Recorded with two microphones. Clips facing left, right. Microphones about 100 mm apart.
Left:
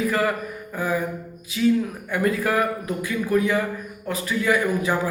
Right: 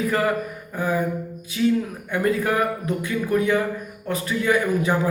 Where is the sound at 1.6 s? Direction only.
25° right (ahead or behind).